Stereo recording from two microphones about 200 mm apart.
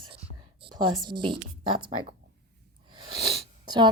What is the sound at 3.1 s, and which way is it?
Sniff, 25° right (ahead or behind).